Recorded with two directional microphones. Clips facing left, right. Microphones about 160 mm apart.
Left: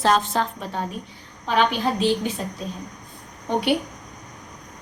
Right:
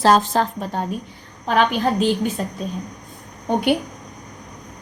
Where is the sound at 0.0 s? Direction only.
35° right (ahead or behind).